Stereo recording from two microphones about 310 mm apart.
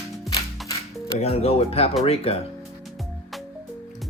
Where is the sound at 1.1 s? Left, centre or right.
Centre.